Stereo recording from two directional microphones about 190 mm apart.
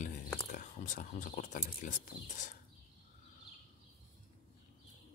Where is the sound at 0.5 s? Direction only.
45° left (ahead or behind).